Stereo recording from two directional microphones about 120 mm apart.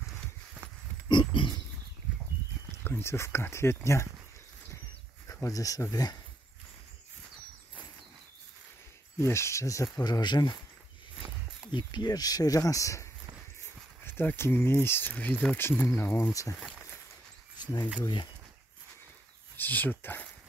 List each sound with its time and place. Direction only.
1.0 s pig: 45° left (ahead or behind)
2.8 s speech: 20° left (ahead or behind)
5.2 s speech: 25° left (ahead or behind)
9.2 s speech: 25° left (ahead or behind)
11.7 s speech: 40° left (ahead or behind); by 16.3 s 20° left (ahead or behind)
18.0 s speech: 40° left (ahead or behind)
19.5 s speech: 15° left (ahead or behind)